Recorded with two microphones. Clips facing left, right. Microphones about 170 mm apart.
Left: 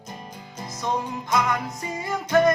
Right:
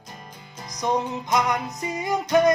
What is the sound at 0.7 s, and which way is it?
Music, 15° right (ahead or behind).